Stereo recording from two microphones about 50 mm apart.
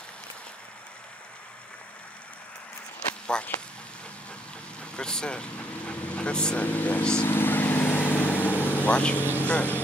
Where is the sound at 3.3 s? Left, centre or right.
Centre.